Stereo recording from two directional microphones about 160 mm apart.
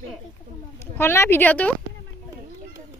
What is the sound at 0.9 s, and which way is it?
Speech, 15° left (ahead or behind).